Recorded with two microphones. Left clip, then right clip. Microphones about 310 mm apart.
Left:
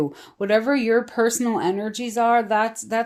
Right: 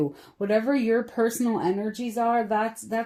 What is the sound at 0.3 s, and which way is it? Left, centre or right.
Speech, left.